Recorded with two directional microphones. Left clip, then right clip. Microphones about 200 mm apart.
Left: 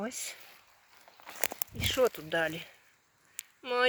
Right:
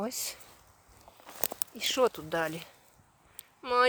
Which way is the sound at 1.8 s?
5° right (ahead or behind).